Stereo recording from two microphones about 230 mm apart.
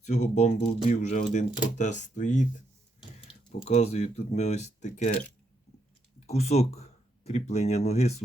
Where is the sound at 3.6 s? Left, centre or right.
Left.